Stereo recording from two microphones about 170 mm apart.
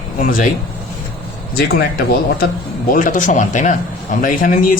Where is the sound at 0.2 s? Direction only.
55° left (ahead or behind).